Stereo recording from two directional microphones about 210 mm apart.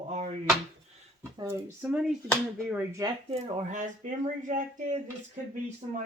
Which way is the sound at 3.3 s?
35° right (ahead or behind).